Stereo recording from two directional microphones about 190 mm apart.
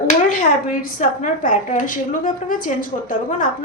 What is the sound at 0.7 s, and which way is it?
A woman's voice, 45° left (ahead or behind).